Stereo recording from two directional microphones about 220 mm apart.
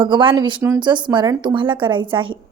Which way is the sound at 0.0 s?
20° right (ahead or behind).